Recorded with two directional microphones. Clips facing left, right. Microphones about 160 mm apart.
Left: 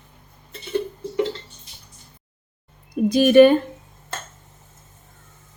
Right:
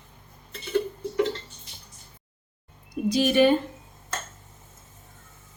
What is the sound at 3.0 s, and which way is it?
Speech, 55° left (ahead or behind).